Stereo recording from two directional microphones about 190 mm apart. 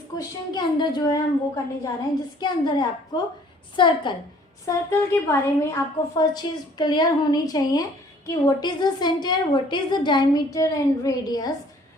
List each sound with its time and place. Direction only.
0.2 s a woman's voice: 20° left (ahead or behind)
4.6 s a woman's voice: 15° left (ahead or behind)